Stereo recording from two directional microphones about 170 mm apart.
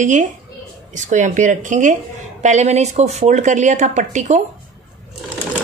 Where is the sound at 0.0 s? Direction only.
45° right (ahead or behind).